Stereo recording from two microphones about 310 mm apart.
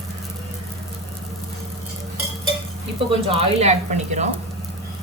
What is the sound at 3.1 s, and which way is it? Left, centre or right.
Speech, centre.